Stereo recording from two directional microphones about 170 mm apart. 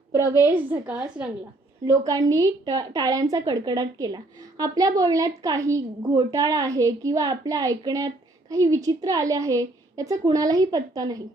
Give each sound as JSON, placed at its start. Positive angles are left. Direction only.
{"t": 0.1, "sound": "a woman's voice", "side_deg": -15}
{"t": 1.9, "sound": "a woman's voice", "side_deg": -20}